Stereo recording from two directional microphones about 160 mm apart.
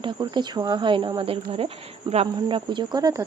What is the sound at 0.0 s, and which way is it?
Speech, 25° right (ahead or behind).